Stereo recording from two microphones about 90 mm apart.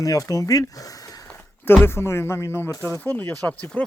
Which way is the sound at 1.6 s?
25° left (ahead or behind).